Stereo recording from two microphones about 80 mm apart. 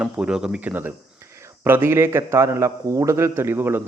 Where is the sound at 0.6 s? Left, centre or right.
Right.